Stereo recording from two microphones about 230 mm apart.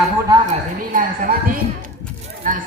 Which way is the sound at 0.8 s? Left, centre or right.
Right.